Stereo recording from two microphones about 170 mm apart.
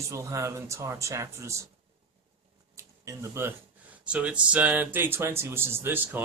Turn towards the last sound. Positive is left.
turn(degrees=-10)  # may be behind; listen again after turning